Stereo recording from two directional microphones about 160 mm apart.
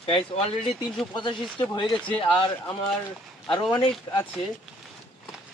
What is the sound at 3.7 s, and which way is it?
Speech, 30° left (ahead or behind).